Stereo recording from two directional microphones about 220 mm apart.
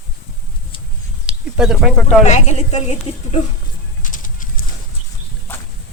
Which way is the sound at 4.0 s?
35° left (ahead or behind).